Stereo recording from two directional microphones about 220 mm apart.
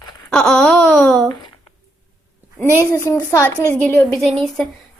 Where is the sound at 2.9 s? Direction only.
15° left (ahead or behind).